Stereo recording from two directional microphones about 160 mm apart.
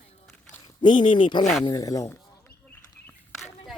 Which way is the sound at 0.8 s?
30° left (ahead or behind).